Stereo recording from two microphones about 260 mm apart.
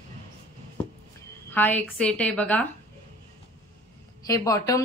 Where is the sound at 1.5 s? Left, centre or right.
Centre.